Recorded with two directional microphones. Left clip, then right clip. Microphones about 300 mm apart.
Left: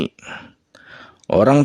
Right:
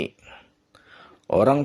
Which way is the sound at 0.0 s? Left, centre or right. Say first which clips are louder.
Left 5 dB; left.